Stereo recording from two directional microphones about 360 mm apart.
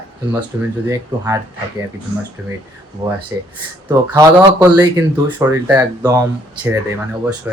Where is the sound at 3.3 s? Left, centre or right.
Centre.